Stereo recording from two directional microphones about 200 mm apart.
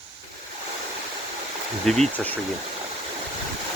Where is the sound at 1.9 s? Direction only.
5° left (ahead or behind).